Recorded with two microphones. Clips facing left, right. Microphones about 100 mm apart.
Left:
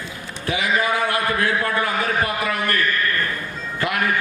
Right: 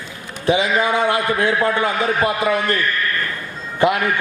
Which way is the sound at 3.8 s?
20° right (ahead or behind).